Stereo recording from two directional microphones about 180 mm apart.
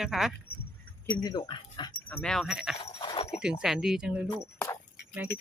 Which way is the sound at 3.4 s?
5° right (ahead or behind).